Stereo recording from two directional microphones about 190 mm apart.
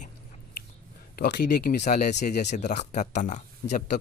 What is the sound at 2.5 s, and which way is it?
Speech, 40° left (ahead or behind).